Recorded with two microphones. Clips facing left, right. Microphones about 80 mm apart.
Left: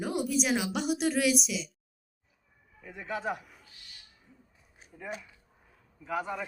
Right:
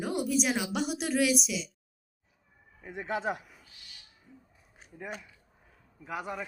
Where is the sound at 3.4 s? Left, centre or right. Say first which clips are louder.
Even; centre.